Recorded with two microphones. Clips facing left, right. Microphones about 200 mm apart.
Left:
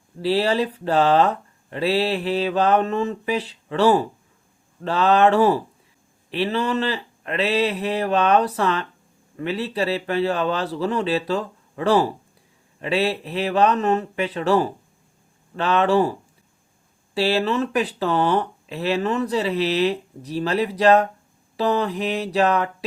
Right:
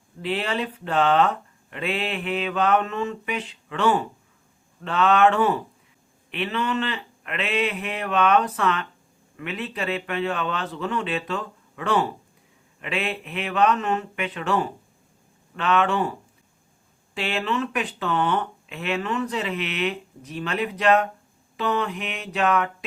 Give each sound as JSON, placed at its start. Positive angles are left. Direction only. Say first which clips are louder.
{"t": 0.2, "sound": "speech", "louder": "left 6 dB", "side_deg": 35}
{"t": 17.2, "sound": "speech", "louder": "left 6 dB", "side_deg": 35}